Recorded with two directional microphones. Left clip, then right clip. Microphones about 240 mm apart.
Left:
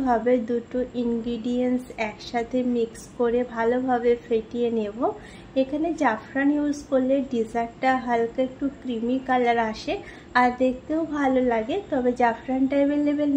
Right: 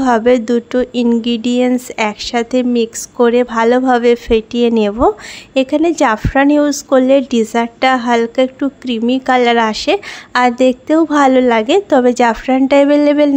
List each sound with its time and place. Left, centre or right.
0.0 s speech: right